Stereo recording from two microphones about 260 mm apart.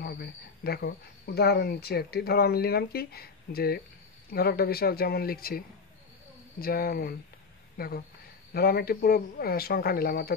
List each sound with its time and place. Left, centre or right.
0.0 s speech: left
6.6 s speech: left